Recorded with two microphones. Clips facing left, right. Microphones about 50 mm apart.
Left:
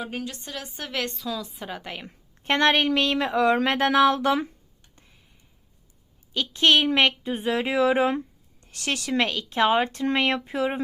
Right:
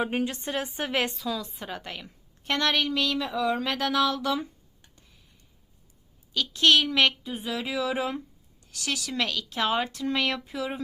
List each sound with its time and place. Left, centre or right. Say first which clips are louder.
0.0 s speech: right 5 dB; right
1.1 s a woman's voice: even; centre
2.4 s a woman's voice: left 5 dB; left
3.7 s a woman's voice: left 6 dB; left
6.3 s a woman's voice: left 1 dB; left